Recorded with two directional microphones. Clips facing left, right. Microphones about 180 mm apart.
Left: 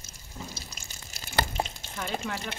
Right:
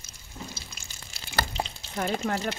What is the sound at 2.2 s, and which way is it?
Speech, 45° right (ahead or behind).